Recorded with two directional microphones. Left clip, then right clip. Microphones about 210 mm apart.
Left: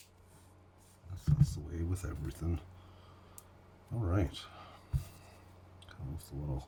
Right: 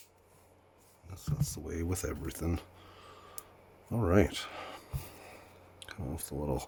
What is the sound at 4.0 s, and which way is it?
Speech, 50° right (ahead or behind).